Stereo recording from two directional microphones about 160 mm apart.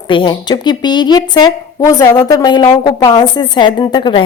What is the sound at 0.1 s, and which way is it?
A woman's voice, 30° left (ahead or behind).